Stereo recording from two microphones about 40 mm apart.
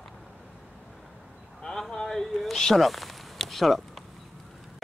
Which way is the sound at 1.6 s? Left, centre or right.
Centre.